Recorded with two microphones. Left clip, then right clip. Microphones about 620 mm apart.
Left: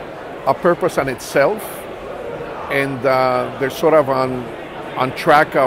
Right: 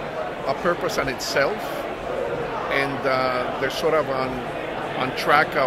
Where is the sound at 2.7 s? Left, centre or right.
Left.